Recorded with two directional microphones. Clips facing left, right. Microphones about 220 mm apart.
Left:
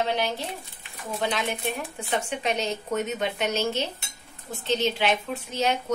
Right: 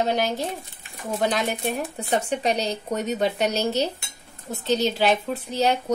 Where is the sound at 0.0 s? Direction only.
45° right (ahead or behind).